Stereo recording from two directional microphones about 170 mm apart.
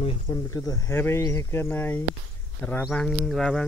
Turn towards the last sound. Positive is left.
turn(degrees=5)  # may be behind; listen again after turning